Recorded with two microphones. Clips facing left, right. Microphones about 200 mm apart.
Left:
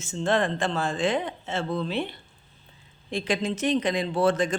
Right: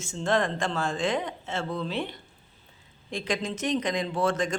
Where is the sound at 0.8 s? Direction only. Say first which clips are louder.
Left 2 dB; 5° left (ahead or behind).